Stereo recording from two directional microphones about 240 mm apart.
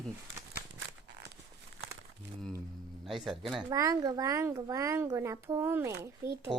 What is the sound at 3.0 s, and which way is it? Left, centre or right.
Speech, centre.